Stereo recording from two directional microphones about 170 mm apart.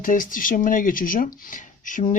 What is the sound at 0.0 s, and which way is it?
Speech, 55° left (ahead or behind).